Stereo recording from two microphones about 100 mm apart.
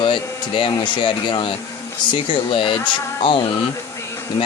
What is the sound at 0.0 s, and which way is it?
Speech, 55° left (ahead or behind).